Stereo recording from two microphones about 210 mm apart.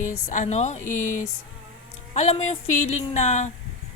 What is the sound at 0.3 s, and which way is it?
Speech, 35° left (ahead or behind).